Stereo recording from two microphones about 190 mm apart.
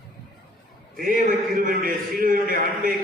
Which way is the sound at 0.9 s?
50° right (ahead or behind).